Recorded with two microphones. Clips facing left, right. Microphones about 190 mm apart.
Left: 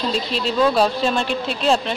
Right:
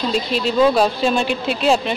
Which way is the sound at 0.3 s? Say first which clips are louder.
Right 4 dB; 5° right (ahead or behind).